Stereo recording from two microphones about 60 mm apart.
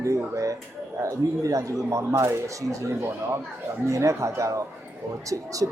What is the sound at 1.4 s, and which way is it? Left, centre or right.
A man's voice, right.